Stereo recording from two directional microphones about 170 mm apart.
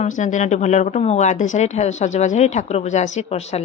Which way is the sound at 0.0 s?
45° left (ahead or behind).